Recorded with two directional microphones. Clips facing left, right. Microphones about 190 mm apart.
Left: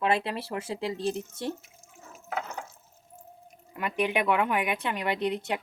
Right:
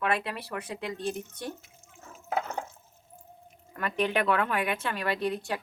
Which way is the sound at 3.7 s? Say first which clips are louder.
Even; 15° left (ahead or behind).